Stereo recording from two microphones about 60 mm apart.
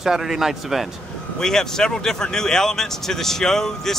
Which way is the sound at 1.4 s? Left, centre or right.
Centre.